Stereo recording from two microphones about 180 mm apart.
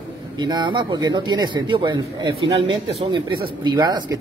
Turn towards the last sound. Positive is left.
turn(degrees=-25)  # may be behind; listen again after turning